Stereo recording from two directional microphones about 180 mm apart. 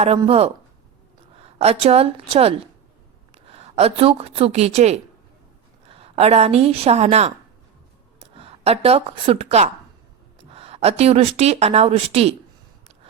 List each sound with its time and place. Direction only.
0.3 s a woman's voice: 35° right (ahead or behind)
8.4 s speech: 35° right (ahead or behind)